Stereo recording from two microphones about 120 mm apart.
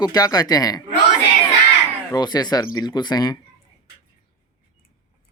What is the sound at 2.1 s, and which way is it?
Speech, 35° left (ahead or behind).